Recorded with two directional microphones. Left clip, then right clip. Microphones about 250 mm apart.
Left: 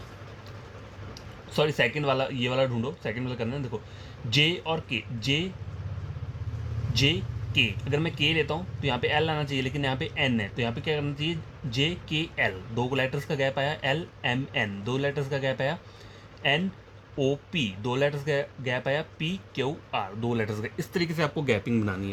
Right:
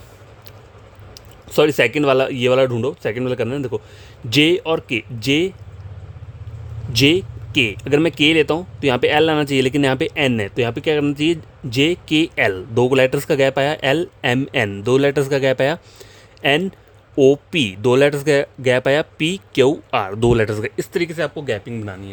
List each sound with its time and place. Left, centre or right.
1.5 s speech: right
6.9 s speech: right; by 21.9 s centre